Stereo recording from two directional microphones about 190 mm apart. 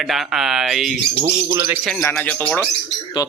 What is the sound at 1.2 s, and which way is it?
Speech, 25° right (ahead or behind).